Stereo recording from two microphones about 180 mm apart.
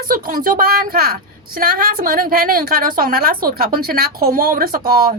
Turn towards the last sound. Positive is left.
turn(degrees=-55)  # may be behind; listen again after turning